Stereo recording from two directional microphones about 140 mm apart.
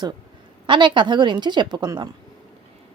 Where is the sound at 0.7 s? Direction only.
35° right (ahead or behind).